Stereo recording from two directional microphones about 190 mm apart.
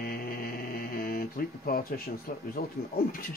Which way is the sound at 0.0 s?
50° left (ahead or behind).